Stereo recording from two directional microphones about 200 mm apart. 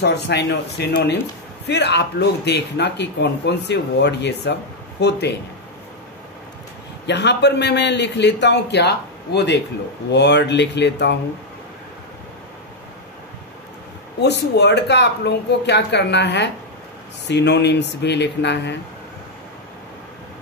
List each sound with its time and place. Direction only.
0.0 s speech: 55° left (ahead or behind)
7.1 s speech: 60° left (ahead or behind)
14.2 s speech: 55° left (ahead or behind)